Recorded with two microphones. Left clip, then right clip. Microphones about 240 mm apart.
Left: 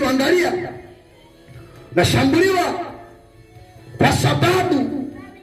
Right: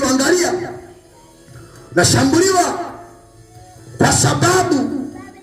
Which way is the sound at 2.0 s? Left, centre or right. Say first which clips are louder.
Right 2 dB; right.